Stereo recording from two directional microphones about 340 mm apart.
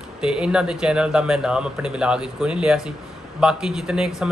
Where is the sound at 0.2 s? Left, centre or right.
Centre.